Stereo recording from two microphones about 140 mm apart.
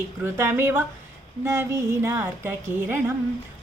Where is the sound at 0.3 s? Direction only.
15° right (ahead or behind).